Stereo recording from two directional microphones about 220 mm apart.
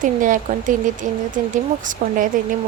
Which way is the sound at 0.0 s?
35° right (ahead or behind).